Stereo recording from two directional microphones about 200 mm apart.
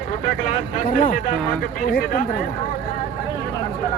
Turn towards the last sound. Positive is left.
turn(degrees=45)  # may be behind; listen again after turning